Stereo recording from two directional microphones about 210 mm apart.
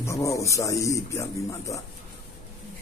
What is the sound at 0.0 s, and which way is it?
Speech, 15° left (ahead or behind).